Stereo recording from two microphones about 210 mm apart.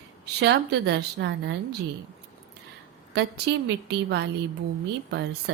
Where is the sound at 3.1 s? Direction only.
55° right (ahead or behind).